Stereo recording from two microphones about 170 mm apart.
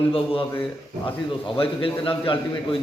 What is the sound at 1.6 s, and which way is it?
Speech, 30° left (ahead or behind).